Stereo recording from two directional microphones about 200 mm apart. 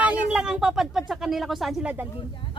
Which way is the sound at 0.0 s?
5° right (ahead or behind).